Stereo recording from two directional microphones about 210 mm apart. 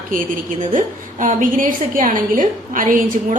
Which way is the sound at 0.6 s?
40° right (ahead or behind).